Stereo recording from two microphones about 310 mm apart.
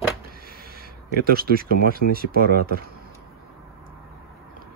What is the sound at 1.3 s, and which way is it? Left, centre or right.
Speech, right.